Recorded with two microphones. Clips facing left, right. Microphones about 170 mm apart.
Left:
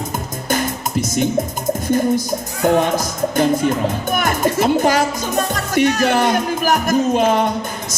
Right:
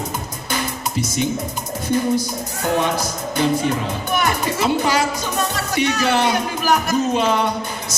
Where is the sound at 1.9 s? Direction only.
45° left (ahead or behind).